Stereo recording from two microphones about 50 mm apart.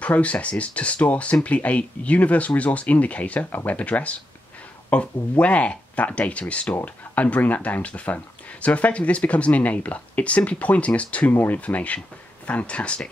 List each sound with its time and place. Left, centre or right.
0.0 s speech: left